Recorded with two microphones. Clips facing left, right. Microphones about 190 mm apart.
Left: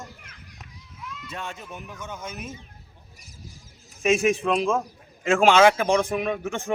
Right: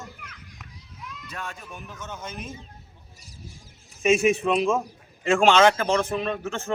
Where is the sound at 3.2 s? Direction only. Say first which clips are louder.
Right 1 dB; 30° right (ahead or behind).